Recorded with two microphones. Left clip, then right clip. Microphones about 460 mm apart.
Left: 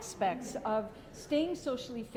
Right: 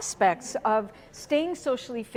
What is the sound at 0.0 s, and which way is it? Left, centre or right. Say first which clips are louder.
A woman's voice: right 10 dB; right.